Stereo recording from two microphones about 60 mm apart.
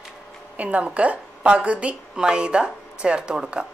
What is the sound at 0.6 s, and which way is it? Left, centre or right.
A woman's voice, right.